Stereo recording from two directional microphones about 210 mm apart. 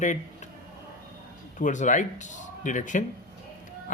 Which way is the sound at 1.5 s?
35° left (ahead or behind).